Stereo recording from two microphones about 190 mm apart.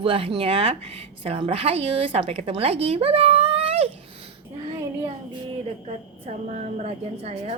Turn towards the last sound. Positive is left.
turn(degrees=-35)  # may be behind; listen again after turning